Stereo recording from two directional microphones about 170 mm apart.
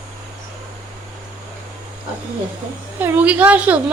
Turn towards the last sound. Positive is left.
turn(degrees=-10)  # may be behind; listen again after turning